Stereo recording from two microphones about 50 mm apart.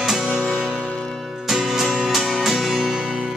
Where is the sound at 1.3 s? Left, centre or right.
Centre.